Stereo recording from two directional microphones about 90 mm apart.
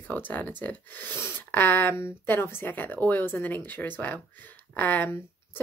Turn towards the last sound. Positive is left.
turn(degrees=15)  # may be behind; listen again after turning